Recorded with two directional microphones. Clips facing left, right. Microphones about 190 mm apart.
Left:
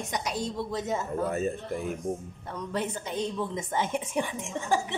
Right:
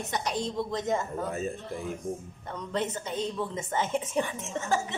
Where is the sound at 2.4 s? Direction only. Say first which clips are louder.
Right 1 dB; 10° left (ahead or behind).